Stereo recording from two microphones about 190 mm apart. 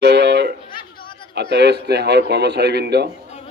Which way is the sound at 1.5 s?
60° right (ahead or behind).